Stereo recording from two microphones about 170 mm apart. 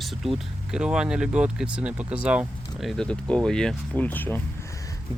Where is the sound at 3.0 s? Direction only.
5° left (ahead or behind).